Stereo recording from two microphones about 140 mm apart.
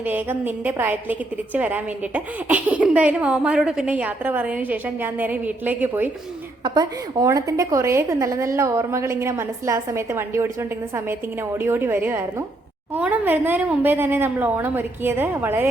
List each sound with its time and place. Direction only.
0.0 s a woman's voice: 10° right (ahead or behind)
6.7 s a woman's voice: 25° right (ahead or behind)